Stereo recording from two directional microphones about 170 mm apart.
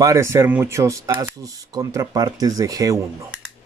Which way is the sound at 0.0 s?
15° right (ahead or behind).